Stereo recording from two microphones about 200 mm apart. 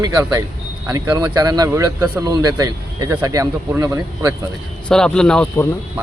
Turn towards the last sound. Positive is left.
turn(degrees=5)  # may be behind; listen again after turning